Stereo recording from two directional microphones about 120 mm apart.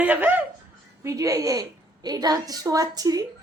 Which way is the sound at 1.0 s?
25° right (ahead or behind).